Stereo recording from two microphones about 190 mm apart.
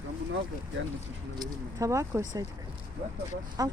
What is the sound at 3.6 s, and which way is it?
Speech, 20° right (ahead or behind).